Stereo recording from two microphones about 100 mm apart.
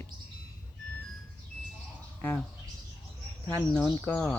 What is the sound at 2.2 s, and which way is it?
Speech, 20° left (ahead or behind).